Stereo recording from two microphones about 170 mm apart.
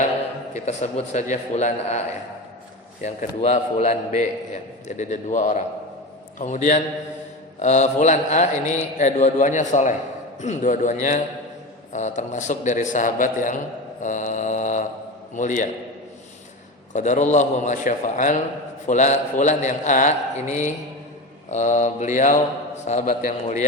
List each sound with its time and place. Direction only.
0.5 s a man's voice: 40° left (ahead or behind)
3.0 s a man's voice: 40° left (ahead or behind)
14.0 s mantra: 45° left (ahead or behind)
15.4 s a man's voice: 45° left (ahead or behind)
16.9 s a man's voice: 45° left (ahead or behind)